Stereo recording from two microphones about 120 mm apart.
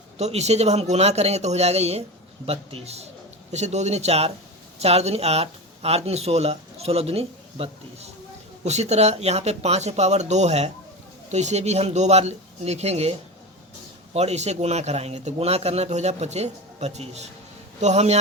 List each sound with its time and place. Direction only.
0.2 s a man's voice: 65° right (ahead or behind)